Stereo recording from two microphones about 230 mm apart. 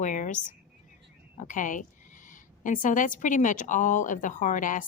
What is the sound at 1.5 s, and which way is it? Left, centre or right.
A woman's voice, left.